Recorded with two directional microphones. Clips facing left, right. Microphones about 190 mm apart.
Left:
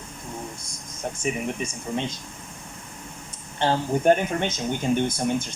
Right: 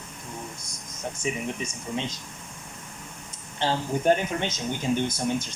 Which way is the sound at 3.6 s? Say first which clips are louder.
Left 3 dB; 55° left (ahead or behind).